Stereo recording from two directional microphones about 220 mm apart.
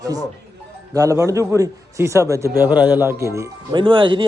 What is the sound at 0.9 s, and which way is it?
A man's voice, 15° right (ahead or behind).